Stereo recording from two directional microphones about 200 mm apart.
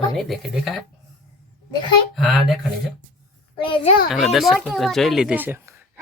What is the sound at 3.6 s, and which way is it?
Speech, 25° left (ahead or behind).